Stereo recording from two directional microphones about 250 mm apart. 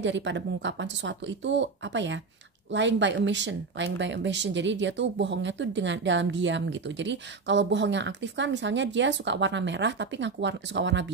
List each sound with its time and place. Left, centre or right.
0.0 s speech: right